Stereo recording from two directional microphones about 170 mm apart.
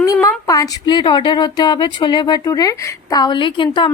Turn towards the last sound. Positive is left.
turn(degrees=30)  # may be behind; listen again after turning